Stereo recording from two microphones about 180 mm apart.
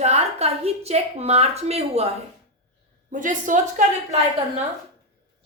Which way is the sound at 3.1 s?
45° right (ahead or behind).